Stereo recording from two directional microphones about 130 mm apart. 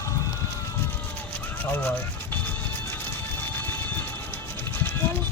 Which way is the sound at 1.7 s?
15° left (ahead or behind).